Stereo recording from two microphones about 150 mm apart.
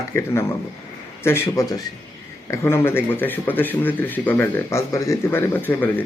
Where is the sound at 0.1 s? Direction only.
15° left (ahead or behind).